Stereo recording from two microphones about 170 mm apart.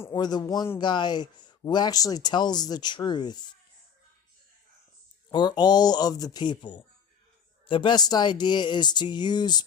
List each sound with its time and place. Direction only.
0.1 s speech: 25° left (ahead or behind)
5.3 s speech: 25° left (ahead or behind)